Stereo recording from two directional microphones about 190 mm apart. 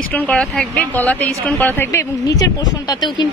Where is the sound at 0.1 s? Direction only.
5° left (ahead or behind).